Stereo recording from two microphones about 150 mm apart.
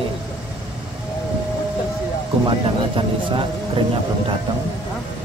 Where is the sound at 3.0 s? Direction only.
35° right (ahead or behind).